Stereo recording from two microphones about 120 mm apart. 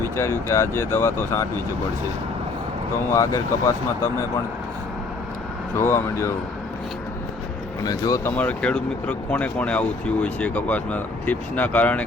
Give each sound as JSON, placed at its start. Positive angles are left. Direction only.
{"t": 0.0, "sound": "speech", "side_deg": 20}
{"t": 3.1, "sound": "speech", "side_deg": 25}
{"t": 5.7, "sound": "speech", "side_deg": 20}
{"t": 7.9, "sound": "speech", "side_deg": 30}
{"t": 8.2, "sound": "speech", "side_deg": 15}